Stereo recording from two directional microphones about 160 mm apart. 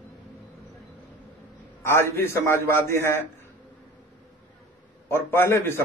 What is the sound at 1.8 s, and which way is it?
A man's voice, 15° left (ahead or behind).